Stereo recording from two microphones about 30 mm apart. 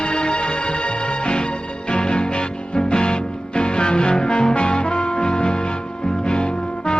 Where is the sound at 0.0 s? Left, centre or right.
Left.